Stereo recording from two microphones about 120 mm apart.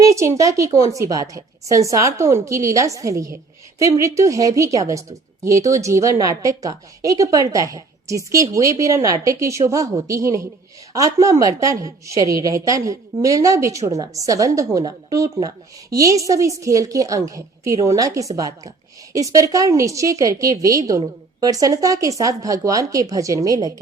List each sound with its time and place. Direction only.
0.0 s a woman's voice: 25° right (ahead or behind)